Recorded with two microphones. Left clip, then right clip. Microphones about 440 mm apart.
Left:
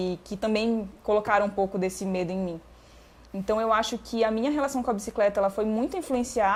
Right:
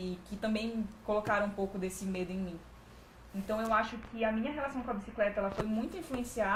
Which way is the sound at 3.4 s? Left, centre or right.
Left.